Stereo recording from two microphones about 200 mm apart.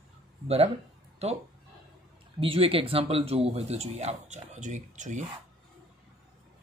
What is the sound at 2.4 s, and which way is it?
Speech, 25° right (ahead or behind).